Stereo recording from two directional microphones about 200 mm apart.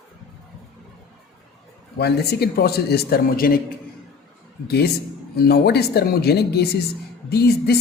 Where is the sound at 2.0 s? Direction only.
55° left (ahead or behind).